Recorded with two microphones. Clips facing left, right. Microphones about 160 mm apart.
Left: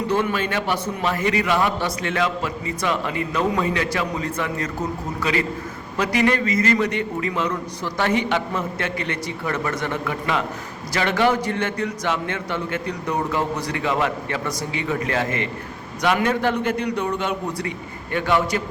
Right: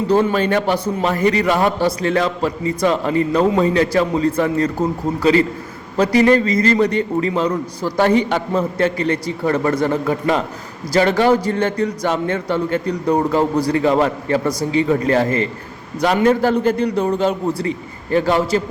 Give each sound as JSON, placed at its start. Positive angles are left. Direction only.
{"t": 0.1, "sound": "a man's voice", "side_deg": -40}